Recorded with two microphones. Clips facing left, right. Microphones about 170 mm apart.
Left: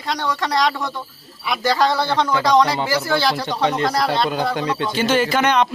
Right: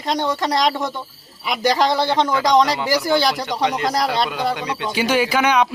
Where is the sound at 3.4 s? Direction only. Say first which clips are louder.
Left 1 dB; 30° left (ahead or behind).